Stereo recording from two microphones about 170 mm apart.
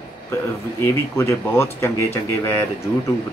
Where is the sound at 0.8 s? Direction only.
15° left (ahead or behind).